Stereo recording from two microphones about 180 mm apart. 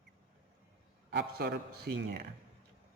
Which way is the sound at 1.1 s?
65° right (ahead or behind).